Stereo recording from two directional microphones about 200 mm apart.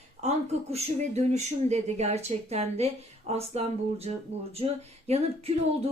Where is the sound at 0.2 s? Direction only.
30° right (ahead or behind).